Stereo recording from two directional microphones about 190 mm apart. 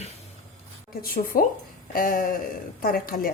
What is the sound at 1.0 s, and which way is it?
Speech, 50° left (ahead or behind).